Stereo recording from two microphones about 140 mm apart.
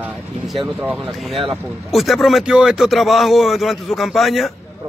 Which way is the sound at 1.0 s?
Centre (ahead or behind).